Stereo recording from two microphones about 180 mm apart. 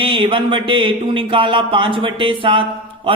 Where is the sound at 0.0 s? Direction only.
30° right (ahead or behind).